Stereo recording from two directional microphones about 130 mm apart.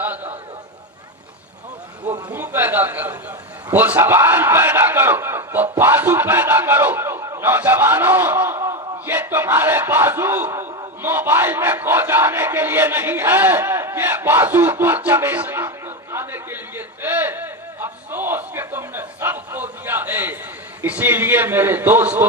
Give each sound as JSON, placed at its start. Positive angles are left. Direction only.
{"t": 2.3, "sound": "a man's voice", "side_deg": -15}
{"t": 16.1, "sound": "a sound", "side_deg": -15}
{"t": 20.8, "sound": "a man's voice", "side_deg": -15}